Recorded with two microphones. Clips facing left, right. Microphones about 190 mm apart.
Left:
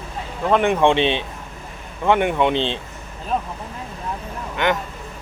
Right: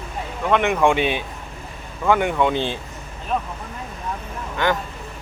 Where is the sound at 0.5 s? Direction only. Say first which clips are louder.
Left 2 dB; 30° left (ahead or behind).